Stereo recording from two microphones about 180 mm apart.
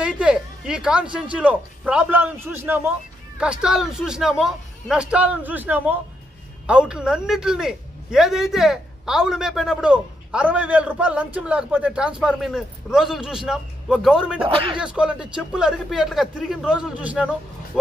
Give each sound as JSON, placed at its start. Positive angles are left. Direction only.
{"t": 0.0, "sound": "a sound", "side_deg": -5}
{"t": 1.3, "sound": "a man's voice", "side_deg": -5}
{"t": 14.4, "sound": "speech", "side_deg": -30}
{"t": 14.8, "sound": "a man's voice", "side_deg": -5}